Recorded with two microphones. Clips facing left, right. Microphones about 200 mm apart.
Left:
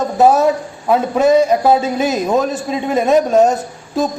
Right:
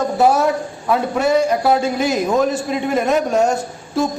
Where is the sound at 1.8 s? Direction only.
20° left (ahead or behind).